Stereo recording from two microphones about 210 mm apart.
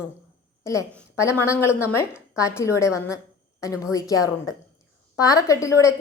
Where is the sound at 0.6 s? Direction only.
15° left (ahead or behind).